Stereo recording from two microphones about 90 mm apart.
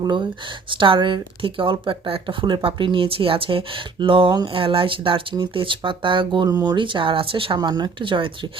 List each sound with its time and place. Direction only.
0.0 s speech: 55° right (ahead or behind); by 3.6 s 85° right
4.0 s speech: 70° right (ahead or behind)
4.5 s speech: 85° right; by 6.5 s 65° right (ahead or behind)
6.5 s speech: 45° right (ahead or behind)
6.7 s speech: 65° right (ahead or behind)
7.6 s speech: 50° right (ahead or behind)